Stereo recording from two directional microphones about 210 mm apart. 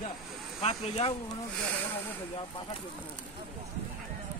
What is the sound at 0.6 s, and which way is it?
Speech, 30° left (ahead or behind).